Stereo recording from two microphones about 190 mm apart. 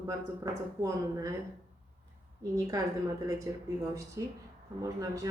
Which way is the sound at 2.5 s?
20° right (ahead or behind).